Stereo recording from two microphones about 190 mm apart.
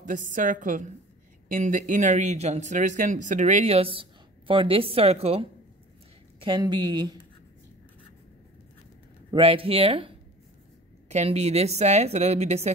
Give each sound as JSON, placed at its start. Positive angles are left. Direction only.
{"t": 0.0, "sound": "a woman's voice", "side_deg": -45}
{"t": 9.3, "sound": "speech", "side_deg": -30}